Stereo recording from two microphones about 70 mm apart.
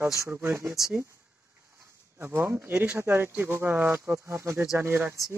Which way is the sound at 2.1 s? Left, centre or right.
Right.